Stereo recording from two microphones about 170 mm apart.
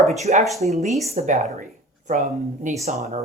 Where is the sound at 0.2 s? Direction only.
40° right (ahead or behind).